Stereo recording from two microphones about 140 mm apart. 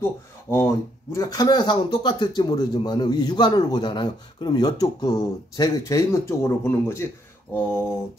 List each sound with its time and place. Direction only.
0.0 s speech: 15° left (ahead or behind)
7.5 s mantra: 15° left (ahead or behind)